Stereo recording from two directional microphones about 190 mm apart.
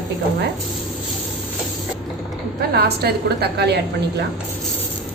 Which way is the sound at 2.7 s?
55° right (ahead or behind).